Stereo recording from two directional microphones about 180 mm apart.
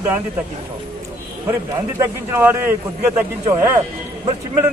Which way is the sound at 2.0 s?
10° right (ahead or behind).